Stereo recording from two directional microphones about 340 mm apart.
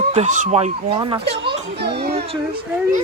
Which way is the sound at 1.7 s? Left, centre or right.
Right.